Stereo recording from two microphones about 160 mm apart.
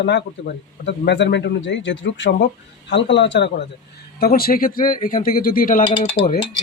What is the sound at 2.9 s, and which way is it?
Speech, 90° left.